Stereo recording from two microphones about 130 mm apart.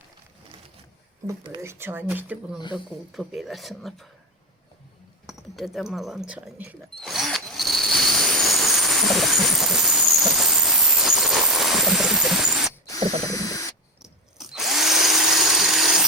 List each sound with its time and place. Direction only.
1.6 s speech: 15° right (ahead or behind)
2.7 s speech: centre (ahead or behind)
5.2 s speech: centre (ahead or behind)
7.0 s drill: centre (ahead or behind)
12.8 s ratchet: 25° left (ahead or behind)
14.0 s drill: 5° right (ahead or behind)